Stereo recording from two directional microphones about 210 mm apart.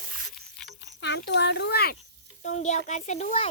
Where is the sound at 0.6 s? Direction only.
55° left (ahead or behind).